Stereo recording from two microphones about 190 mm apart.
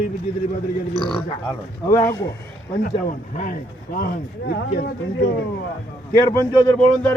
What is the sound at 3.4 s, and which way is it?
A man's voice, 45° left (ahead or behind).